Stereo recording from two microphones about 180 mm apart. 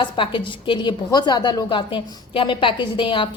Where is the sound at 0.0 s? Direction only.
25° left (ahead or behind).